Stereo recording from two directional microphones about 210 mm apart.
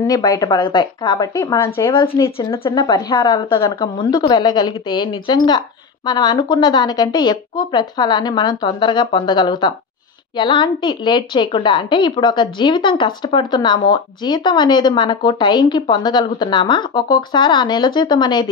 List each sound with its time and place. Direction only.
0.0 s a woman's voice: 15° left (ahead or behind)